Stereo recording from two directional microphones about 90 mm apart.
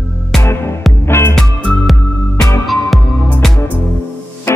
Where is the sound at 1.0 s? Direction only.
30° left (ahead or behind).